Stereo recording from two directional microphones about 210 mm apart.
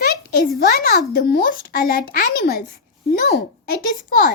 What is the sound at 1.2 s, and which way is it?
Speech, 50° left (ahead or behind).